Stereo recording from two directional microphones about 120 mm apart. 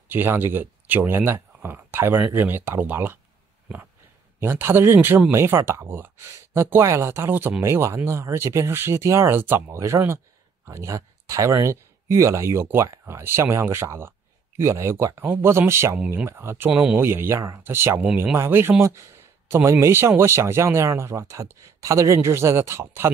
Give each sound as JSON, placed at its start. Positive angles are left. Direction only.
{"t": 0.1, "sound": "speech", "side_deg": -15}
{"t": 4.4, "sound": "speech", "side_deg": -20}